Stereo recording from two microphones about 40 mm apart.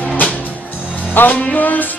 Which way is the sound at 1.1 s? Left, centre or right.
Left.